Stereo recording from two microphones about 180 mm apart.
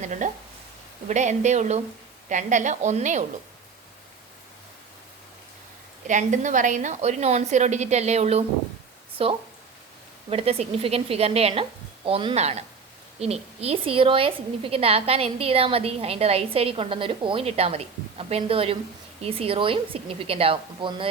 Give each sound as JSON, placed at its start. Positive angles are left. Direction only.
{"t": 0.0, "sound": "a woman's voice", "side_deg": -40}
{"t": 6.1, "sound": "a woman's voice", "side_deg": -45}